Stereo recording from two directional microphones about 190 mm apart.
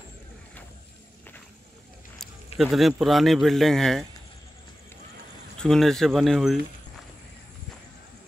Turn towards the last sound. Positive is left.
turn(degrees=0)  # may be behind; listen again after turning